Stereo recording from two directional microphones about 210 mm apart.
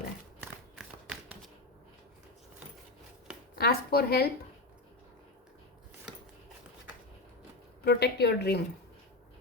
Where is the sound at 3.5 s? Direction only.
50° left (ahead or behind).